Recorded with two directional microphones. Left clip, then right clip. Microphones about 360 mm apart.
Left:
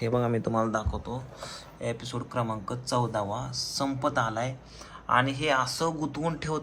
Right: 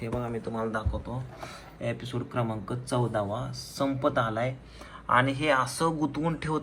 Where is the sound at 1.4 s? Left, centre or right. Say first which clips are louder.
Left 1 dB; centre.